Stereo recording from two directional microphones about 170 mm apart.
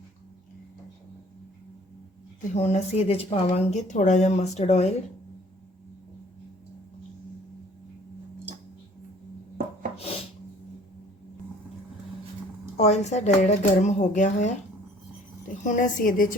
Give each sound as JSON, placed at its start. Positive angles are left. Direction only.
{"t": 2.5, "sound": "speech", "side_deg": 40}
{"t": 12.7, "sound": "speech", "side_deg": 40}
{"t": 15.6, "sound": "speech", "side_deg": 50}